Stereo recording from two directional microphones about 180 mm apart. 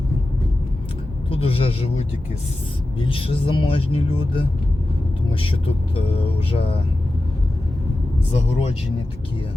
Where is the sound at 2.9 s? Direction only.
30° left (ahead or behind).